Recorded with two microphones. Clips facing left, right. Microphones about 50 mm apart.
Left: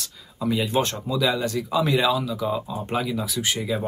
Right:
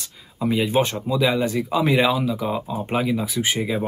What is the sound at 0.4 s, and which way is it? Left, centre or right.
Speech, centre.